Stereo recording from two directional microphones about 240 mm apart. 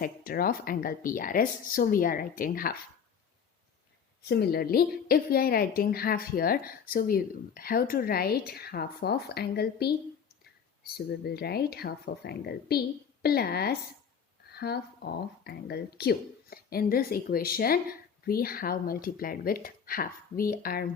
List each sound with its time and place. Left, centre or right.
0.0 s a woman's voice: left
4.2 s a woman's voice: left
10.9 s a woman's voice: left